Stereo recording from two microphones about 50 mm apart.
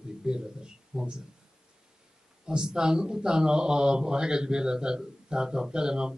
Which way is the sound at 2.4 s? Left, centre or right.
Centre.